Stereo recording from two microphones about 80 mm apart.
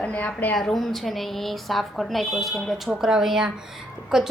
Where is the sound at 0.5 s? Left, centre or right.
Centre.